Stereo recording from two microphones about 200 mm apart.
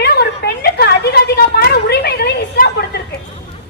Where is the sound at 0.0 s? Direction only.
55° left (ahead or behind).